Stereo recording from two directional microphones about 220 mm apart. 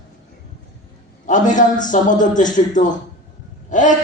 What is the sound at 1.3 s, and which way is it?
A man's voice, 35° left (ahead or behind).